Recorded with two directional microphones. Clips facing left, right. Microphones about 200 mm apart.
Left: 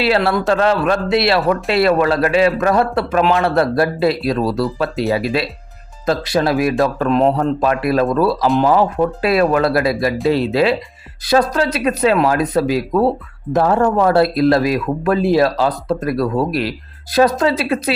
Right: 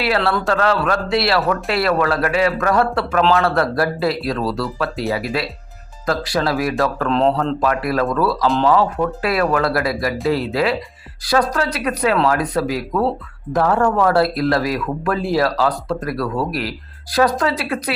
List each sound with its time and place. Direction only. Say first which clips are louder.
0.2 s speech: left 3 dB; 20° left (ahead or behind)
7.1 s speech: left 2 dB; 10° left (ahead or behind)
7.3 s speech: left 2 dB; 25° left (ahead or behind)